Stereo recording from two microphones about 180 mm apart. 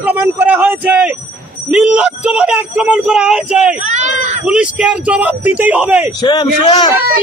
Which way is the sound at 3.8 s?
40° right (ahead or behind).